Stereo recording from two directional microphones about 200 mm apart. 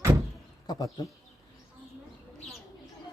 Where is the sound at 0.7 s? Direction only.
20° left (ahead or behind).